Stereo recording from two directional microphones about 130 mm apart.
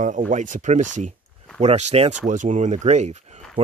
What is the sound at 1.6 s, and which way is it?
Speech, 60° right (ahead or behind).